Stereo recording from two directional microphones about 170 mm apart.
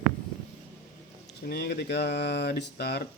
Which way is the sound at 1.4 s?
75° left (ahead or behind).